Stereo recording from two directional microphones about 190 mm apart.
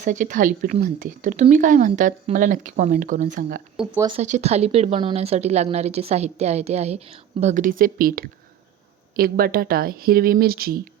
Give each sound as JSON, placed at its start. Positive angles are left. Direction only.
{"t": 0.0, "sound": "speech", "side_deg": -40}
{"t": 4.0, "sound": "a woman's voice", "side_deg": -35}